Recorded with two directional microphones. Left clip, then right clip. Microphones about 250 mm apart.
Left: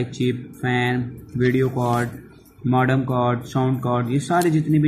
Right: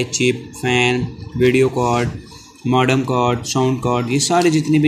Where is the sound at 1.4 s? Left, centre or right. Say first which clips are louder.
Right 6 dB; centre.